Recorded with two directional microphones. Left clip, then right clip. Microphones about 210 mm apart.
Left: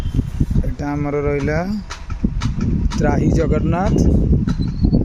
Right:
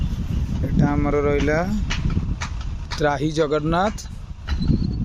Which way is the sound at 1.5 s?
5° left (ahead or behind).